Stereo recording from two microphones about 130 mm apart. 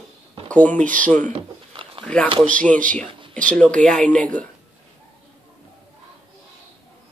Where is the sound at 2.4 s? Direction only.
10° left (ahead or behind).